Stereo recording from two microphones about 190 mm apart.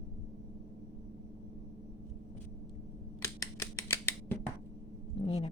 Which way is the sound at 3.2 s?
15° left (ahead or behind).